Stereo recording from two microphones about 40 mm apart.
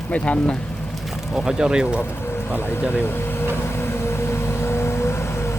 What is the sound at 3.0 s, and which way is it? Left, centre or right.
Air conditioning, left.